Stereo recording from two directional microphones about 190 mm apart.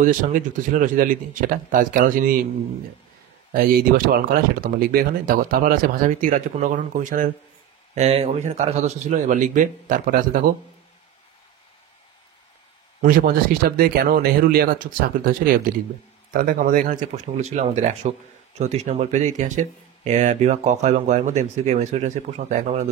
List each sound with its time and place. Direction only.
0.0 s speech: 45° right (ahead or behind)
3.5 s speech: 50° right (ahead or behind)
13.0 s speech: 50° right (ahead or behind)